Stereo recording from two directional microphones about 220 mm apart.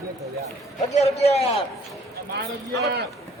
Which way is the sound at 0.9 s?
30° left (ahead or behind).